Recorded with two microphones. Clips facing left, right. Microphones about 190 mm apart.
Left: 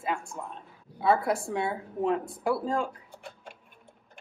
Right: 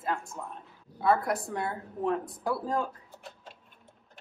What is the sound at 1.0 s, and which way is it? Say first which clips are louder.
A woman's voice: left 1 dB; 25° left (ahead or behind).